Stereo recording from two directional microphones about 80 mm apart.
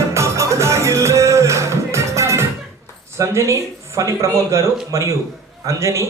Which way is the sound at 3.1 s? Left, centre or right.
Right.